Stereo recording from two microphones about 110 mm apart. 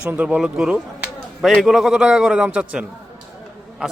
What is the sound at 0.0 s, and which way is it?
Speech, 10° right (ahead or behind).